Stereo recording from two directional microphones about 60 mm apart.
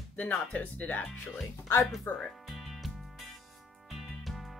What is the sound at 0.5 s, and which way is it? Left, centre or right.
Speech, left.